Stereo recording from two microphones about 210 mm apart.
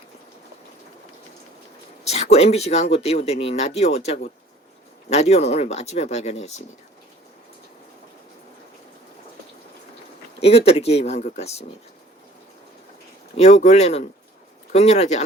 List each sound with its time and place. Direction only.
2.0 s speech: 30° left (ahead or behind)
10.4 s speech: 30° left (ahead or behind)
13.3 s speech: 30° left (ahead or behind)